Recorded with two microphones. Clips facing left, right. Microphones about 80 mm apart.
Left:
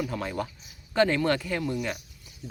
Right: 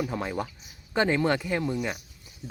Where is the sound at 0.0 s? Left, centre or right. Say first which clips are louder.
Right 1 dB; right.